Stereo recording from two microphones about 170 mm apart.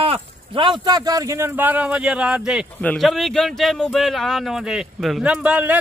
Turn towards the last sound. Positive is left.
turn(degrees=-10)  # may be behind; listen again after turning